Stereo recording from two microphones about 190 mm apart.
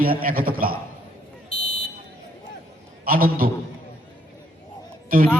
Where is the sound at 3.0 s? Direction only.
50° right (ahead or behind).